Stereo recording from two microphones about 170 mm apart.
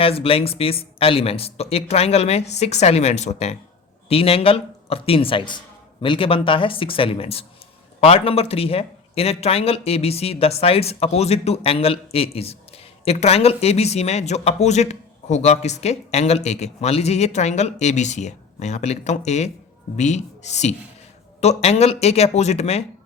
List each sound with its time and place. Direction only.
0.0 s speech: 35° left (ahead or behind)